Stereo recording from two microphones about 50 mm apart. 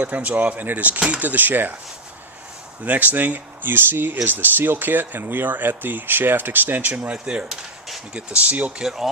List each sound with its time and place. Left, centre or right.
0.0 s speech: right
2.8 s speech: right
8.8 s speech: centre